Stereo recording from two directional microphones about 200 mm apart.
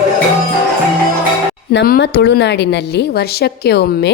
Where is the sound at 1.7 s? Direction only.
55° left (ahead or behind).